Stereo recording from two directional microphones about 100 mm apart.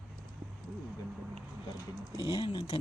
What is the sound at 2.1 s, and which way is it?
Speech, 50° left (ahead or behind).